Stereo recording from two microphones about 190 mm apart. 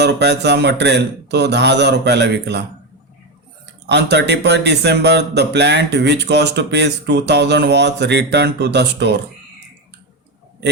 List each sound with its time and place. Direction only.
0.0 s a man's voice: 60° right (ahead or behind)
3.8 s a man's voice: 65° right (ahead or behind)